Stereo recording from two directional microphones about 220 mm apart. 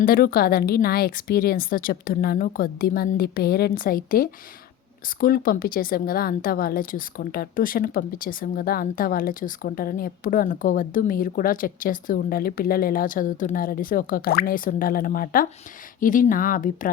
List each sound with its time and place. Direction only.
0.0 s a woman's voice: 40° left (ahead or behind)